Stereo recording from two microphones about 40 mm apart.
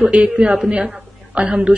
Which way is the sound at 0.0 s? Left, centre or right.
Right.